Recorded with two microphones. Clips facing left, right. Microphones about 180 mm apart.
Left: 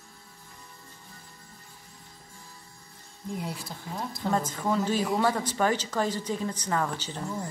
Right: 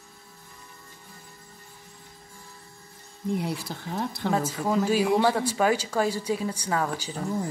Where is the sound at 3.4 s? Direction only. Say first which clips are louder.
Right 5 dB; 70° right (ahead or behind).